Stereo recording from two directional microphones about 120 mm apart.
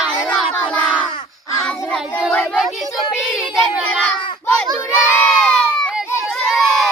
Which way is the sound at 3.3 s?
5° right (ahead or behind).